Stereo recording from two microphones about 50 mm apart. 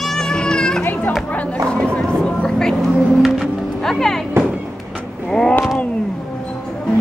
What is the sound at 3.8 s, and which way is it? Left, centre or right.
Speech, centre.